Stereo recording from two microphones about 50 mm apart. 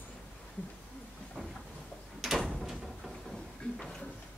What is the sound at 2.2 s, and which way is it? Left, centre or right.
Door, centre.